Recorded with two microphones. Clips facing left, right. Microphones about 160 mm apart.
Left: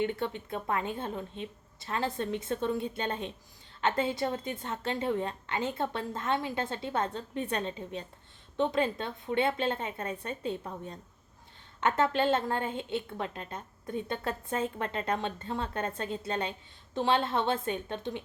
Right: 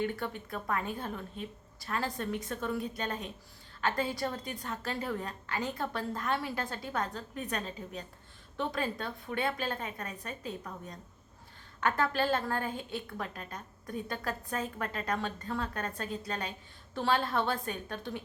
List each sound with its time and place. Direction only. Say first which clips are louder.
0.0 s a woman's voice: left 3 dB; 20° left (ahead or behind)